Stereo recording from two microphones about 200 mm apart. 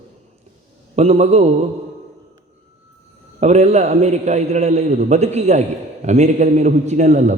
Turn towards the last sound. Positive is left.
turn(degrees=-35)  # may be behind; listen again after turning